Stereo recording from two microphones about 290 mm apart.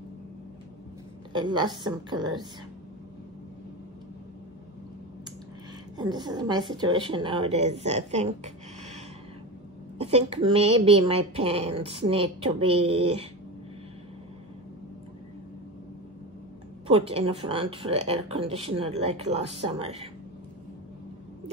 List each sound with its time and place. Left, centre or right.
1.3 s a woman's voice: centre
5.9 s a woman's voice: centre
9.9 s speech: right
16.8 s speech: centre